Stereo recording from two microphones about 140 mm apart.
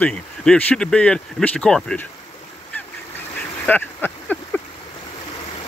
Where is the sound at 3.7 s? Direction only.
10° left (ahead or behind).